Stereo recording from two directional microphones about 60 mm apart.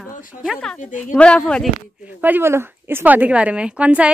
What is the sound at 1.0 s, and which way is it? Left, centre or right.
Speech, left.